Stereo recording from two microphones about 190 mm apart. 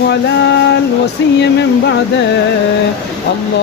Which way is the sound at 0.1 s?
65° left (ahead or behind).